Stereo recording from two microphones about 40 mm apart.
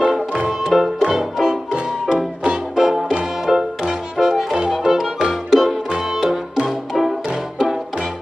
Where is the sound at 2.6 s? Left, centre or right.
Centre.